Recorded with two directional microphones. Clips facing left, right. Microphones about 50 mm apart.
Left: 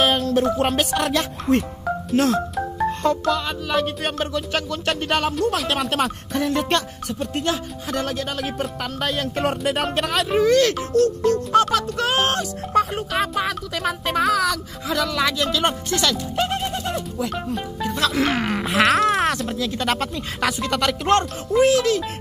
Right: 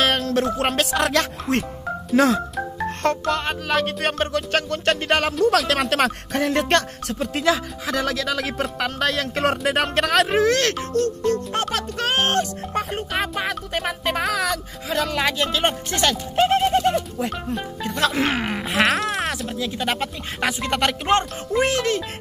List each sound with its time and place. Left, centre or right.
0.0 s music: right
3.0 s speech: right
5.7 s speech: right
8.8 s speech: right
18.3 s speech: centre
19.6 s speech: centre
21.5 s speech: right